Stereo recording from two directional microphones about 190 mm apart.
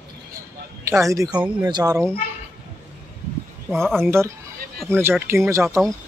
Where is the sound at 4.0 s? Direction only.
15° right (ahead or behind).